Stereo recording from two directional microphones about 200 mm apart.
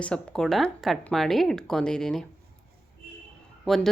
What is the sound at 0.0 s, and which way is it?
Speech, 5° left (ahead or behind).